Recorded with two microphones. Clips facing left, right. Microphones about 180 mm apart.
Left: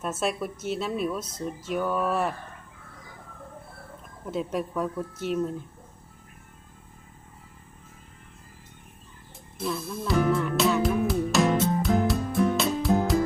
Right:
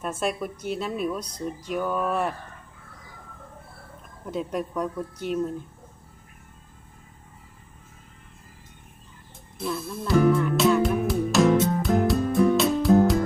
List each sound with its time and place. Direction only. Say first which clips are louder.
0.0 s speech: right 1 dB; centre (ahead or behind)
4.3 s speech: even; centre (ahead or behind)
9.6 s music: even; centre (ahead or behind)